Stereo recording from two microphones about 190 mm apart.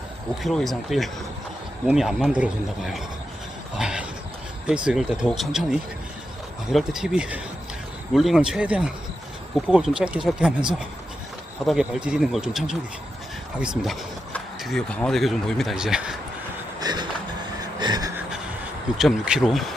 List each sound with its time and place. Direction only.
0.4 s speech: centre (ahead or behind)
3.8 s a sound: 5° right (ahead or behind)
4.6 s speech: 5° right (ahead or behind)
11.6 s speech: centre (ahead or behind)
16.8 s a sound: 20° right (ahead or behind)
18.9 s speech: 5° right (ahead or behind)